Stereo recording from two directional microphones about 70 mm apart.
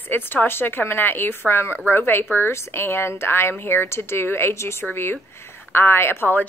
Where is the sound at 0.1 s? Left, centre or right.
Left.